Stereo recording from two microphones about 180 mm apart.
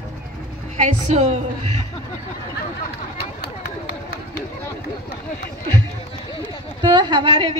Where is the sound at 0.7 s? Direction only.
40° right (ahead or behind).